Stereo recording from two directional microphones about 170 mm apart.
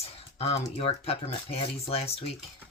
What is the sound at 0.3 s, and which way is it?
Speech, 35° left (ahead or behind).